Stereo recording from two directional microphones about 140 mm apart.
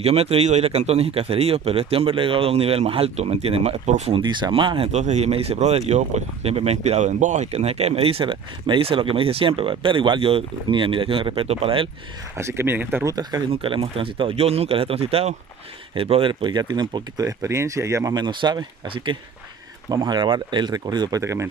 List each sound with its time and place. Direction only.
0.0 s speech: 45° right (ahead or behind)
4.1 s speech: 35° right (ahead or behind)
4.9 s speech: 55° right (ahead or behind)
12.4 s speech: 20° right (ahead or behind)
13.1 s speech: 30° right (ahead or behind)